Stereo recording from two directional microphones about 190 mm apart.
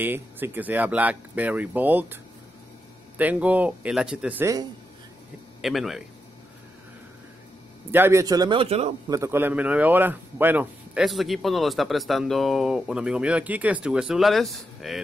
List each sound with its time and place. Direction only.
0.0 s speech: 10° right (ahead or behind)
3.2 s speech: 10° right (ahead or behind)
5.6 s a man's voice: centre (ahead or behind)
7.9 s a man's voice: 15° right (ahead or behind); by 8.9 s 30° right (ahead or behind)
9.1 s a man's voice: 15° right (ahead or behind)